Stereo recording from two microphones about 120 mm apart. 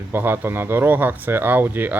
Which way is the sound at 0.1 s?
15° right (ahead or behind).